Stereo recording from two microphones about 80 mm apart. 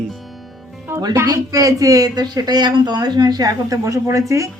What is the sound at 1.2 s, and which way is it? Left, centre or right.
A woman's voice, right.